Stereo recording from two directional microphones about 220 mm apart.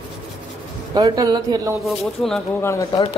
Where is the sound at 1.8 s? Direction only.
Centre (ahead or behind).